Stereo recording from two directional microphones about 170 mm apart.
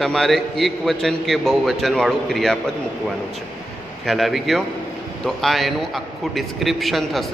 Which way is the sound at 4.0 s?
Centre (ahead or behind).